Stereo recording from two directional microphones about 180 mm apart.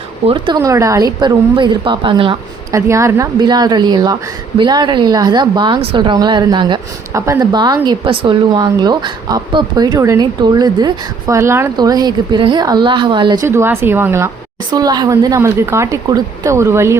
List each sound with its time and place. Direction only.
0.3 s a woman's voice: 25° right (ahead or behind)
2.7 s a woman's voice: 15° right (ahead or behind)